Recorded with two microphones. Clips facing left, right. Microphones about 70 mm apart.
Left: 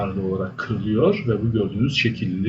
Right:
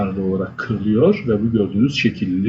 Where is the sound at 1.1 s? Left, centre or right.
Centre.